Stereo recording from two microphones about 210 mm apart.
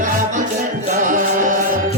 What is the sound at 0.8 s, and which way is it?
Music, 40° right (ahead or behind).